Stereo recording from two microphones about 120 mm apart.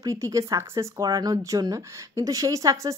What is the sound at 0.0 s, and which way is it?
Speech, 25° right (ahead or behind).